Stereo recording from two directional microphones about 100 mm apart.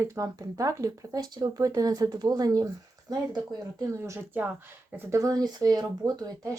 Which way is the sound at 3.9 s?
25° right (ahead or behind).